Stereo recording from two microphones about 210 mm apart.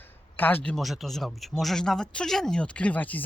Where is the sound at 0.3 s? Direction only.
10° left (ahead or behind).